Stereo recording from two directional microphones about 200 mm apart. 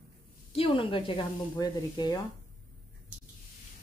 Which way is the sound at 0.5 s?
25° left (ahead or behind).